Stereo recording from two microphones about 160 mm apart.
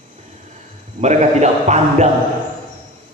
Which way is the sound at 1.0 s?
45° right (ahead or behind).